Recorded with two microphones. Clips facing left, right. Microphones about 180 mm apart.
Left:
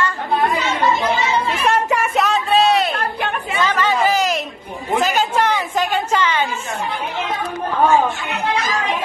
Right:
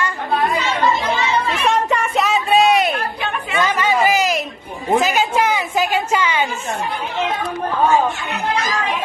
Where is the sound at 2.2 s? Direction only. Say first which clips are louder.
Right 2 dB; 10° right (ahead or behind).